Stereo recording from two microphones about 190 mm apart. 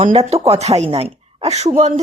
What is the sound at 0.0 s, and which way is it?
Speech, 30° right (ahead or behind).